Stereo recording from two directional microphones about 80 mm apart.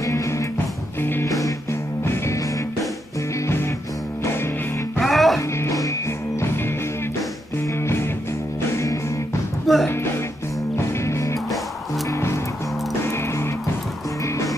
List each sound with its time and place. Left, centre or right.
0.0 s music: left
5.0 s music: centre
5.6 s music: left
7.8 s music: left
9.7 s music: centre
10.8 s music: left